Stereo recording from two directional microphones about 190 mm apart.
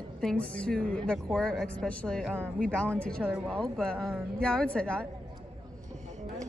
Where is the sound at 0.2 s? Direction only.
5° left (ahead or behind).